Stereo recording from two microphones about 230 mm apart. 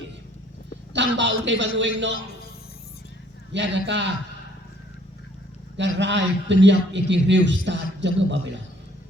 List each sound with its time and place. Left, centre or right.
0.9 s a man's voice: right
3.5 s a man's voice: right
5.7 s a man's voice: right